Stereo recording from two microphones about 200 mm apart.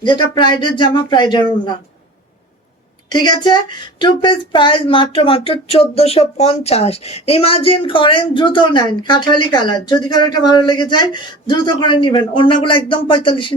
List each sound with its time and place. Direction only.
0.0 s speech: 20° left (ahead or behind)
3.1 s speech: 20° left (ahead or behind)